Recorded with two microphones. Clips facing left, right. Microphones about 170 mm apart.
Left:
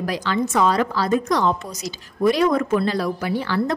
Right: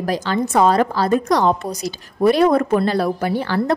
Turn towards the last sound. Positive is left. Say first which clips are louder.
# right 3 dB
turn(degrees=-50)  # may be behind; listen again after turning